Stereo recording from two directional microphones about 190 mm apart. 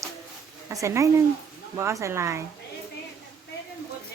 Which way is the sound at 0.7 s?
15° right (ahead or behind).